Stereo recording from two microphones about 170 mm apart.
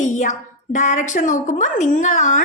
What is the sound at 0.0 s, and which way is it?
A woman's voice, 45° left (ahead or behind).